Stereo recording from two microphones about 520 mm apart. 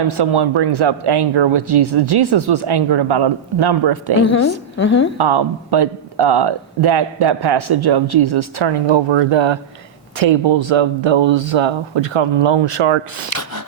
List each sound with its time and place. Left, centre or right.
0.1 s speech: right
4.8 s a woman's voice: left
5.1 s speech: right
8.7 s speech: right
10.5 s speech: right